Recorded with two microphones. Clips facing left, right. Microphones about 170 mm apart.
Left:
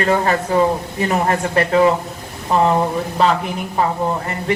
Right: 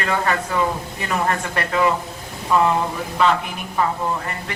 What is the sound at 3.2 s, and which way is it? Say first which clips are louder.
Speech: left 2 dB; 30° left (ahead or behind).